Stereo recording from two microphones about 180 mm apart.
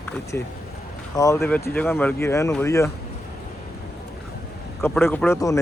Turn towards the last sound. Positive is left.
turn(degrees=15)  # may be behind; listen again after turning